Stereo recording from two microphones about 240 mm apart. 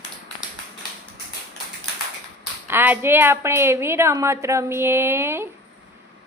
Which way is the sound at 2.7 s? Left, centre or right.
Centre.